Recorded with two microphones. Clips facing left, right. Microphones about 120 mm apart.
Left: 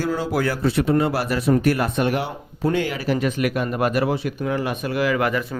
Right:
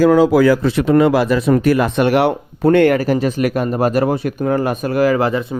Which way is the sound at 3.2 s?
35° right (ahead or behind).